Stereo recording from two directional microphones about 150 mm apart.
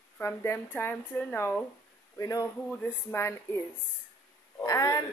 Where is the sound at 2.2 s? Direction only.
25° left (ahead or behind).